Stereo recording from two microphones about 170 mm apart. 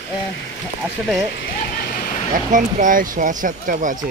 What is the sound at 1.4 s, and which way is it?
Vehicle, 55° left (ahead or behind).